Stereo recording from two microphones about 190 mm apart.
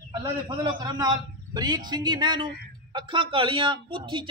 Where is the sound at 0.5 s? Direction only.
25° right (ahead or behind).